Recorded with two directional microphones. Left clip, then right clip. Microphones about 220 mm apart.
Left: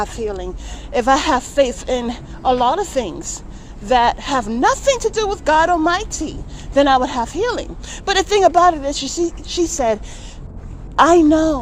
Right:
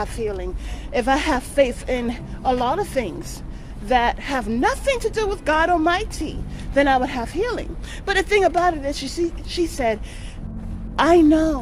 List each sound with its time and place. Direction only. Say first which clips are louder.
0.0 s a woman's voice: left 3 dB; 15° left (ahead or behind)